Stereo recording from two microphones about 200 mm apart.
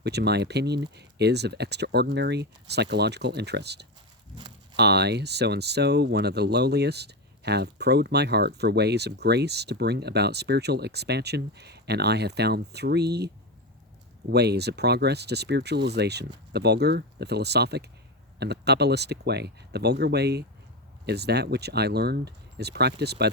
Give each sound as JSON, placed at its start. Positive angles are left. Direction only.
{"t": 0.0, "sound": "speech", "side_deg": -55}
{"t": 4.4, "sound": "a sound", "side_deg": -20}
{"t": 4.8, "sound": "speech", "side_deg": -55}